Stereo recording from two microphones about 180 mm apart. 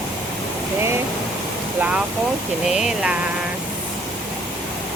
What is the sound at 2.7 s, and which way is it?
Speech, 5° right (ahead or behind).